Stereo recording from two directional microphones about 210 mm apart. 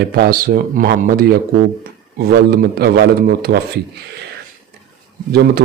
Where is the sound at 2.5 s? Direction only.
45° right (ahead or behind).